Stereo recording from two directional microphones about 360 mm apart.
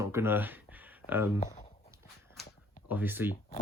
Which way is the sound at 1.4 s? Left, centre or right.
Centre.